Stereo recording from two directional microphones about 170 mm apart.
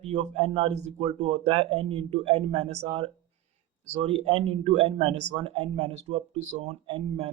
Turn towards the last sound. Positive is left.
turn(degrees=-35)  # may be behind; listen again after turning